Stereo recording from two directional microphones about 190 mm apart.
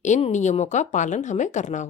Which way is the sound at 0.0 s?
40° left (ahead or behind).